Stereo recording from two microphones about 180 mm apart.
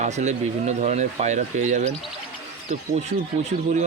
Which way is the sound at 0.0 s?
40° right (ahead or behind).